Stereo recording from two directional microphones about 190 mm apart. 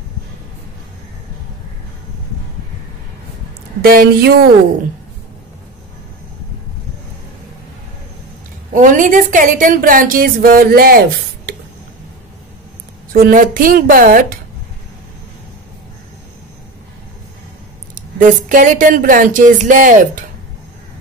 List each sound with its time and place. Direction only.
3.8 s a woman's voice: 50° right (ahead or behind)
8.7 s a woman's voice: 45° right (ahead or behind)
13.1 s a woman's voice: 45° right (ahead or behind)
17.9 s a woman's voice: 45° right (ahead or behind)